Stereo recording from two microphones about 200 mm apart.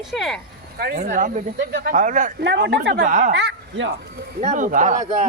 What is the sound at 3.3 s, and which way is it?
Speech, 60° right (ahead or behind).